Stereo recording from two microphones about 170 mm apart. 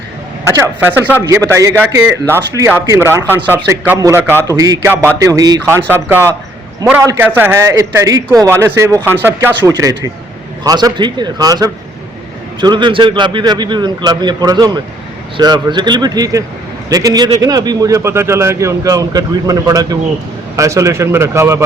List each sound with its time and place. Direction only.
0.5 s a man's voice: 15° right (ahead or behind)